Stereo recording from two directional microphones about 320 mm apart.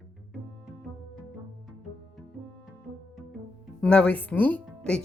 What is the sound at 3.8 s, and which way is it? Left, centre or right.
Speech, centre.